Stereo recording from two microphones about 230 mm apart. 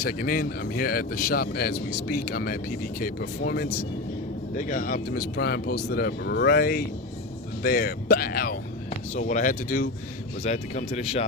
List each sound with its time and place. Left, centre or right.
0.0 s speech: left